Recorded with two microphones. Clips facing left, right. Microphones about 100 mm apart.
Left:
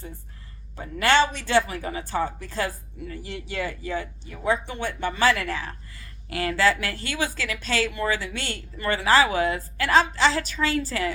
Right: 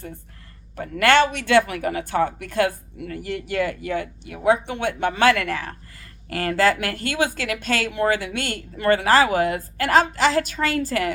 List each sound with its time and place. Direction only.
0.8 s speech: 60° right (ahead or behind)